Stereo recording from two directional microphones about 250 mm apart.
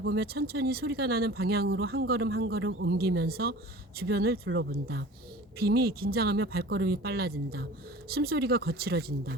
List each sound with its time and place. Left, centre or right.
0.0 s speech: right